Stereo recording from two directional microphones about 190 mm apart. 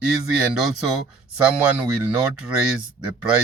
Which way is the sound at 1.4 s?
5° right (ahead or behind).